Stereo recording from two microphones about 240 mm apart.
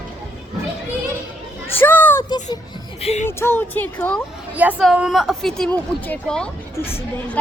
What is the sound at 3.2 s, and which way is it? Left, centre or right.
A woman's voice, centre.